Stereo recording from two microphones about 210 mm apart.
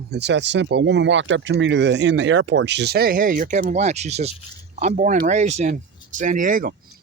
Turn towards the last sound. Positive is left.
turn(degrees=-40)  # may be behind; listen again after turning